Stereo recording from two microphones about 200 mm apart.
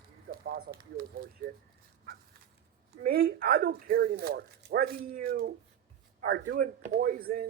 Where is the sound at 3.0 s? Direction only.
50° right (ahead or behind).